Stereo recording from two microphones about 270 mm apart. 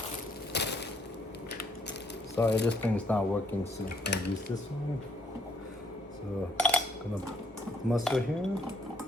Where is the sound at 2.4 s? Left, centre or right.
Left.